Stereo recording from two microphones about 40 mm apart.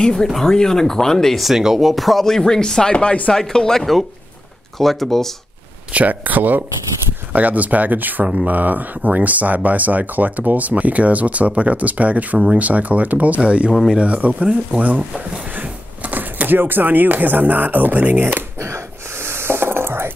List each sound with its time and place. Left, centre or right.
0.0 s speech: centre
1.4 s speech: centre
2.2 s speech: centre
3.3 s speech: centre
4.7 s speech: centre
5.9 s speech: right
13.4 s speech: right
19.1 s a sound: right